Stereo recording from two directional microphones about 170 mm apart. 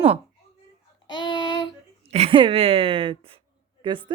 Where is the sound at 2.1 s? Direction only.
35° right (ahead or behind).